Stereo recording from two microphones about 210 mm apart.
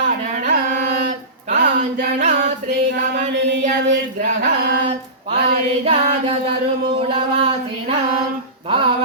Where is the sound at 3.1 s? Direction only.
55° right (ahead or behind).